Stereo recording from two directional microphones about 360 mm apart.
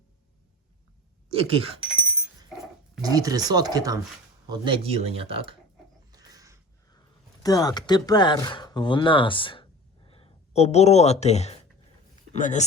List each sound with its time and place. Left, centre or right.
1.3 s speech: centre
1.8 s dog: centre
3.0 s speech: centre
6.1 s a sound: centre
7.4 s a man's voice: centre